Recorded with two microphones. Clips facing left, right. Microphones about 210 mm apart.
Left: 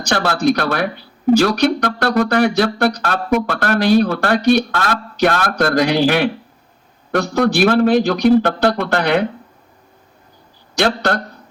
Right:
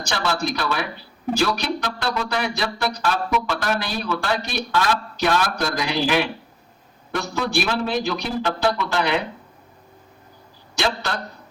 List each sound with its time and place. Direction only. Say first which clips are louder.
0.1 s speech: left 9 dB; 55° left (ahead or behind)
10.8 s a man's voice: left 8 dB; 60° left (ahead or behind)